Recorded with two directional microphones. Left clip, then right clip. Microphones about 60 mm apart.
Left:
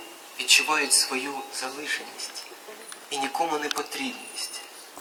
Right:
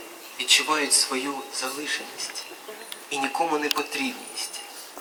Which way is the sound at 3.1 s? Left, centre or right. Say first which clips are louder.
Right 2 dB; left.